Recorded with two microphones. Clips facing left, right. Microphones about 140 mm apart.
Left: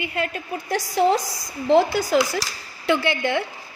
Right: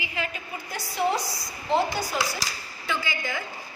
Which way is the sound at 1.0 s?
90° left.